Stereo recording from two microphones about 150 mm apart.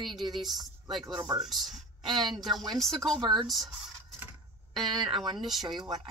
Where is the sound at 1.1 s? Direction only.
30° right (ahead or behind).